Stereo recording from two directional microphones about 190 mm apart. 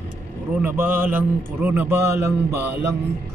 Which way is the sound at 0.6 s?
10° right (ahead or behind).